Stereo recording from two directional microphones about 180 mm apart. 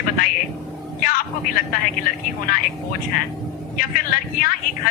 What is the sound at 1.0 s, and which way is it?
Speech, 50° left (ahead or behind).